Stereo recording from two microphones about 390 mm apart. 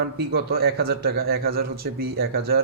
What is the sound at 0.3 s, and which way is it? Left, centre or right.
Speech, right.